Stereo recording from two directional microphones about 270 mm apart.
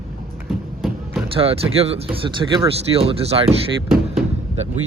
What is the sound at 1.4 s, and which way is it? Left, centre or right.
Speech, right.